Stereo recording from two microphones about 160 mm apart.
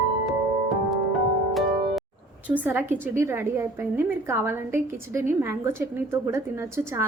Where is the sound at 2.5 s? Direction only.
10° right (ahead or behind).